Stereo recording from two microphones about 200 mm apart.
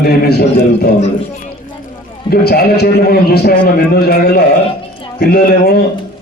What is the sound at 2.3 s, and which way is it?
A man's voice, 50° left (ahead or behind).